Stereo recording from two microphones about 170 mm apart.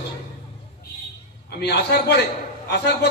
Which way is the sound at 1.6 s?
80° left.